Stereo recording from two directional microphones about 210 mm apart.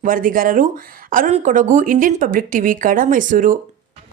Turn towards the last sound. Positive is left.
turn(degrees=-40)  # may be behind; listen again after turning